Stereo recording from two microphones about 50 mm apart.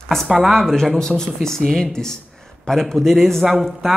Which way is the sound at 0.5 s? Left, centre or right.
Centre.